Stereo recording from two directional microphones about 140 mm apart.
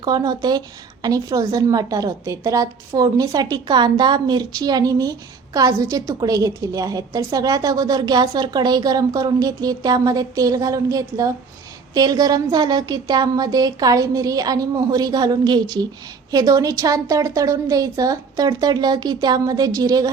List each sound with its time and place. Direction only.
0.0 s a woman's voice: 30° right (ahead or behind)